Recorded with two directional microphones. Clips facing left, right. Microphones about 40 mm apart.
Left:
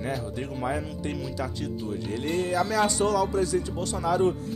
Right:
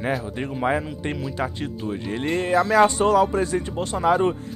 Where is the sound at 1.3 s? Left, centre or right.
Right.